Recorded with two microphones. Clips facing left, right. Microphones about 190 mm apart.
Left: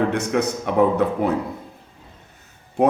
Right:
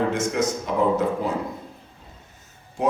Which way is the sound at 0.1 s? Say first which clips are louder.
Left 2 dB; 60° left (ahead or behind).